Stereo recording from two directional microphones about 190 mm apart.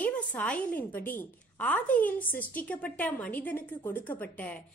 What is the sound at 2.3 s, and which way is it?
Speech, 50° left (ahead or behind).